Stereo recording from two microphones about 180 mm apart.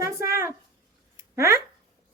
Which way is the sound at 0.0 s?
15° right (ahead or behind).